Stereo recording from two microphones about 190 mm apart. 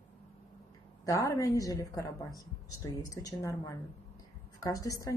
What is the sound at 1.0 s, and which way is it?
A woman's voice, 20° left (ahead or behind).